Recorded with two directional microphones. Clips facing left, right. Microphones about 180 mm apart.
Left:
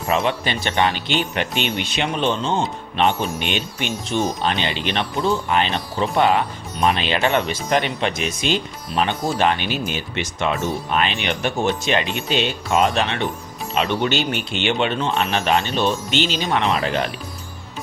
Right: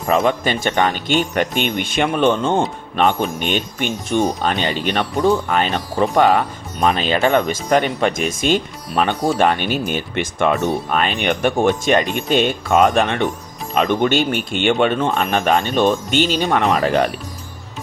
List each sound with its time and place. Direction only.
0.1 s speech: 45° right (ahead or behind)